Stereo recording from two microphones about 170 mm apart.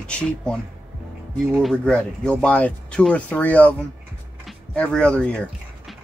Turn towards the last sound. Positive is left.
turn(degrees=5)  # may be behind; listen again after turning